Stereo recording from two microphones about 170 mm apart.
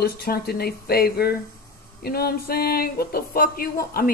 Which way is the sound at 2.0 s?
65° left (ahead or behind).